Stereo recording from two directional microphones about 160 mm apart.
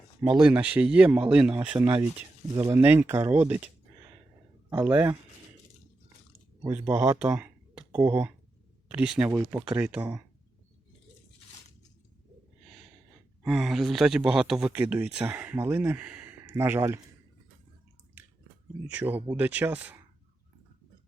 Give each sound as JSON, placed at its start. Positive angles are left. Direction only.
{"t": 0.4, "sound": "speech", "side_deg": -10}
{"t": 4.7, "sound": "speech", "side_deg": -10}
{"t": 6.6, "sound": "speech", "side_deg": -15}
{"t": 13.5, "sound": "speech", "side_deg": 0}
{"t": 18.9, "sound": "speech", "side_deg": -10}